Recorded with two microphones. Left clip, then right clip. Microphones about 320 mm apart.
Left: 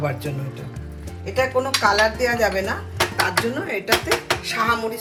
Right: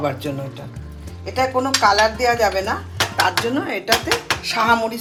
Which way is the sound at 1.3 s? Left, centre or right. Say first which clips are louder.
Right 2 dB; right.